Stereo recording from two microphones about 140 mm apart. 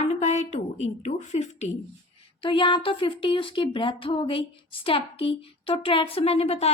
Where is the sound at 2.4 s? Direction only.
35° left (ahead or behind).